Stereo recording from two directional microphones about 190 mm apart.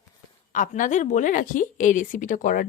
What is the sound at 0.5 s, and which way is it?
A woman's voice, 45° left (ahead or behind).